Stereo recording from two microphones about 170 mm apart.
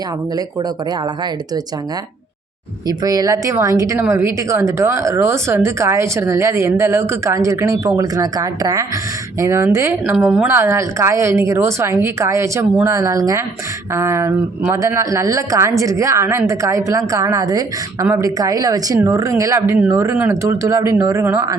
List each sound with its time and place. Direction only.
2.8 s a woman's voice: 20° right (ahead or behind)